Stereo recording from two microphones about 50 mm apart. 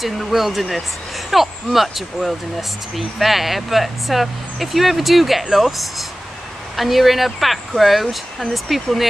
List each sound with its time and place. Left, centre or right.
0.0 s speech: centre